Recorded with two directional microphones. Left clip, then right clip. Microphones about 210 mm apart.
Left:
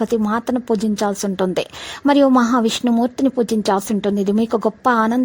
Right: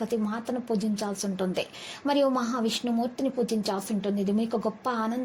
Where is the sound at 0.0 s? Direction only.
45° left (ahead or behind).